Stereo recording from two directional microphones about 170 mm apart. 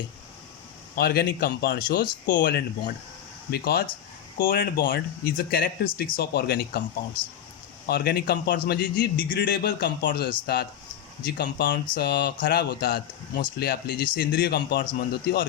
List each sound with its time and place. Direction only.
0.9 s a man's voice: 70° left (ahead or behind)
7.9 s a man's voice: 70° left (ahead or behind); by 10.2 s 85° left
10.4 s a man's voice: 70° left (ahead or behind)
15.1 s a man's voice: 70° left (ahead or behind)